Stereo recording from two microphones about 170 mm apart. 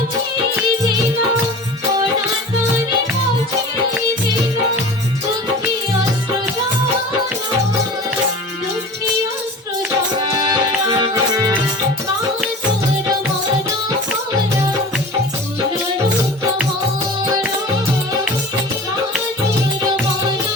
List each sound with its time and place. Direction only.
10.3 s music: 20° right (ahead or behind)